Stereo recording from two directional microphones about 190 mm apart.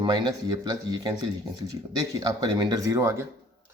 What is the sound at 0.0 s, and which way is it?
Speech, 25° right (ahead or behind).